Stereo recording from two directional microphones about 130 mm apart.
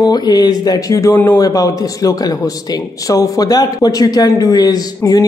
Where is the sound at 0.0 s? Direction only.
30° left (ahead or behind).